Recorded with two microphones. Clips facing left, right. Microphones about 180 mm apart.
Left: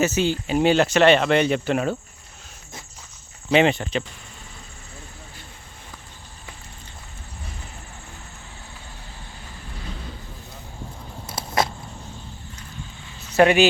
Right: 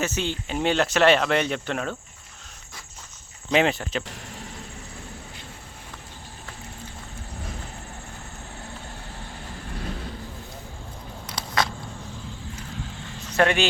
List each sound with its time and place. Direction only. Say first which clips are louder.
0.0 s speech: left 6 dB; 5° left (ahead or behind)
3.5 s speech: left 3 dB; centre (ahead or behind)
11.3 s a sound: left 3 dB; 25° left (ahead or behind)
13.3 s speech: left 6 dB; 10° left (ahead or behind)